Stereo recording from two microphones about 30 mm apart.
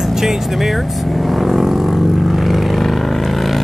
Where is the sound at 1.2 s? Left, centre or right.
Centre.